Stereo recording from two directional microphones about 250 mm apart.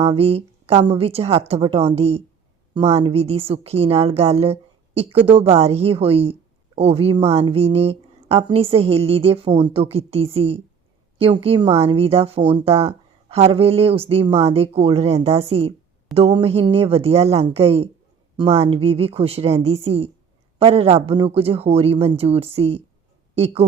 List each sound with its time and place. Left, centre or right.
0.0 s speech: right